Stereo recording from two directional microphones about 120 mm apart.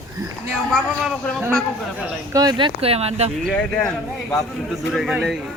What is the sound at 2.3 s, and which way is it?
Speech, 35° right (ahead or behind).